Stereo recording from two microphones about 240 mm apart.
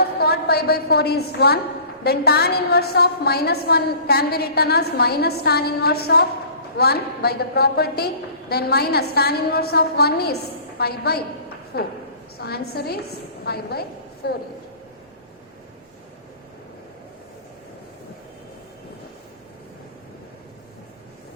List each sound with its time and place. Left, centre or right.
0.0 s a woman's voice: left